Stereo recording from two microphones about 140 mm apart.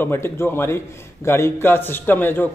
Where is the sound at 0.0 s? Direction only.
15° left (ahead or behind).